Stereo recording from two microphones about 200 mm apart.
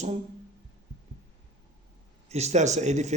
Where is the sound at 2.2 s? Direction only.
35° right (ahead or behind).